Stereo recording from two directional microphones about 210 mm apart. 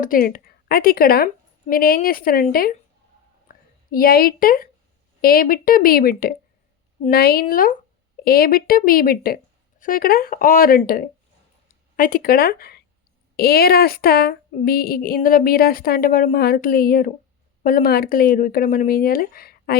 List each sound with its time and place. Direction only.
0.0 s a woman's voice: 40° left (ahead or behind)